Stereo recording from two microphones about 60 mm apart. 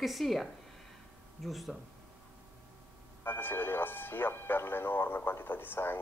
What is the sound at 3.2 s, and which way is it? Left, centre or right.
Speech, left.